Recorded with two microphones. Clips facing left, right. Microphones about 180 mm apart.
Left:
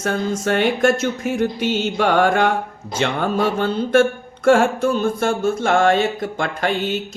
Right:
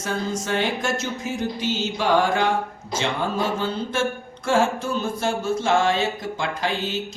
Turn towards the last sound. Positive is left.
turn(degrees=60)  # may be behind; listen again after turning